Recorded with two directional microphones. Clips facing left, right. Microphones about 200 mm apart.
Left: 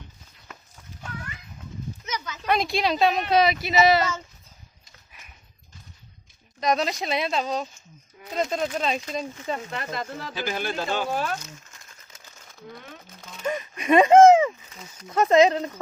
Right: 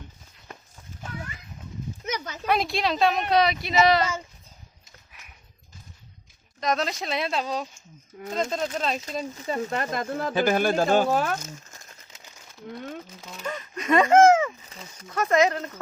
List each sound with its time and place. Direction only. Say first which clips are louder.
2.0 s a sound: right 2 dB; 55° right (ahead or behind)
2.5 s speech: left 1 dB; centre (ahead or behind)
6.6 s speech: left 2 dB; centre (ahead or behind)
8.4 s speech: left 2 dB; 5° left (ahead or behind)
9.6 s speech: right 4 dB; 45° right (ahead or behind)
13.4 s speech: left 4 dB; 15° left (ahead or behind)